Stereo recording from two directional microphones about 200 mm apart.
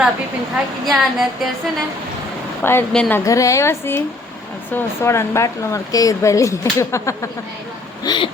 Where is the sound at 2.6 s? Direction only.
10° left (ahead or behind).